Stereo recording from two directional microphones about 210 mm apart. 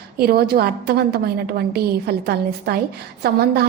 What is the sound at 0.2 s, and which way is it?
A woman's voice, 50° right (ahead or behind).